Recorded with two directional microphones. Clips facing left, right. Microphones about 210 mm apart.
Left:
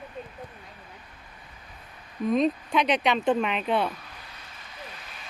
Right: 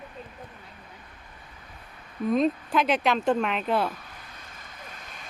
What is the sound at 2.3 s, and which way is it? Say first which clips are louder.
Speech: even; centre (ahead or behind).